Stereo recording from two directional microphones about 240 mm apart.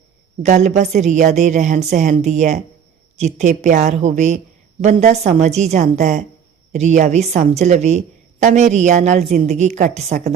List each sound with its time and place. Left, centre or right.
0.4 s a woman's voice: right